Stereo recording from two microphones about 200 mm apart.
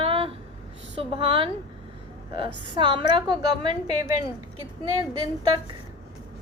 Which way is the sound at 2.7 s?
25° right (ahead or behind).